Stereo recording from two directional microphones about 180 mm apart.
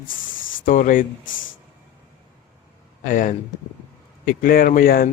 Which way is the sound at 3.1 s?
45° left (ahead or behind).